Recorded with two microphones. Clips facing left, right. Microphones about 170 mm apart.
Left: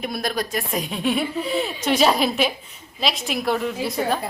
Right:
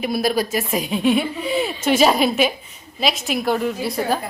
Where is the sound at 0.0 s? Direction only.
5° right (ahead or behind).